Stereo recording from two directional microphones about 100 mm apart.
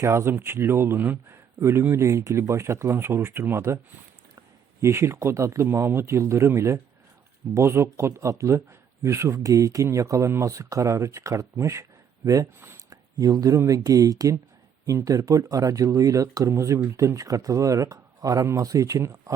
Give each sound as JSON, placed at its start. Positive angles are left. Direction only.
{"t": 0.0, "sound": "speech", "side_deg": -25}
{"t": 4.8, "sound": "speech", "side_deg": -25}